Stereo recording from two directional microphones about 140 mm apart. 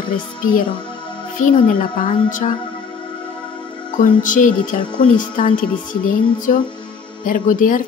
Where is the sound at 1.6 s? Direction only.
65° left (ahead or behind).